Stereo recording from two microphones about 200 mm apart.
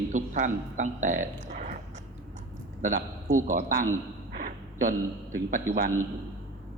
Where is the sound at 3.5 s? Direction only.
40° right (ahead or behind).